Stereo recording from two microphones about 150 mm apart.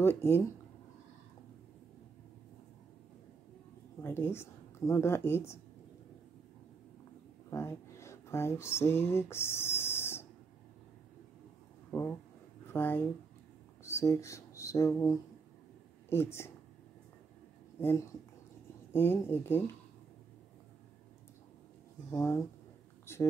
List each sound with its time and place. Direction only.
0.0 s speech: 15° left (ahead or behind)
4.0 s a woman's voice: 15° left (ahead or behind)
7.4 s speech: 20° left (ahead or behind)
12.6 s speech: 15° left (ahead or behind)
17.7 s speech: 15° left (ahead or behind)
22.1 s speech: 20° left (ahead or behind)
23.1 s a sound: 15° left (ahead or behind)